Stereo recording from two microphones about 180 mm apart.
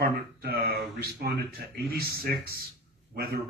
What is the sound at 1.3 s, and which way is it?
Speech, 60° right (ahead or behind).